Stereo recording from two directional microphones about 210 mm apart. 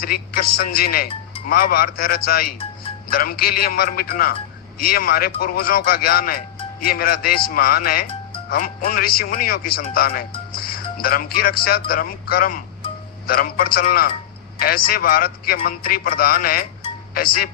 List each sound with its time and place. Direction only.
0.0 s speech: 45° left (ahead or behind)